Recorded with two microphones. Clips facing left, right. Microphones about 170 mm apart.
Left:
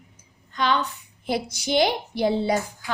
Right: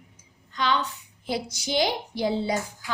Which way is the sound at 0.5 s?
55° left (ahead or behind).